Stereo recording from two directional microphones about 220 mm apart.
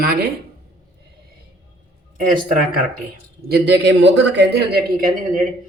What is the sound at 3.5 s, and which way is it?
A man's voice, 50° right (ahead or behind).